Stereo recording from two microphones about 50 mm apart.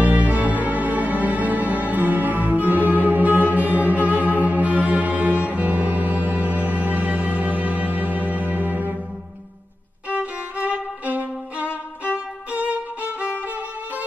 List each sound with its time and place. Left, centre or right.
0.0 s music: right
10.0 s violin: right
11.6 s violin: left
12.5 s violin: right